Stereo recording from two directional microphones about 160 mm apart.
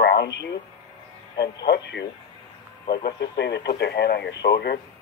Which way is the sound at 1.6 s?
90° left.